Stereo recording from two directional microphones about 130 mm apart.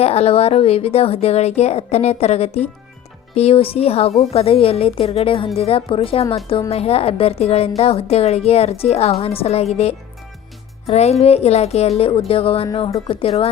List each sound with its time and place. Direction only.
0.0 s speech: 50° left (ahead or behind)